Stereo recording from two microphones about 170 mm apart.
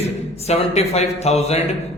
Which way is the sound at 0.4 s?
40° left (ahead or behind).